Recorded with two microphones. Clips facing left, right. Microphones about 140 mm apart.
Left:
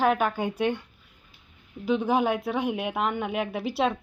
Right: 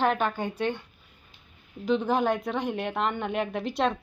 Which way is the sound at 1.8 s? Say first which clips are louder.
Left 1 dB; 10° left (ahead or behind).